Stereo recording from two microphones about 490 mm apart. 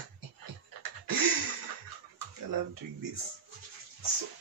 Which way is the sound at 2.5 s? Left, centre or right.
Right.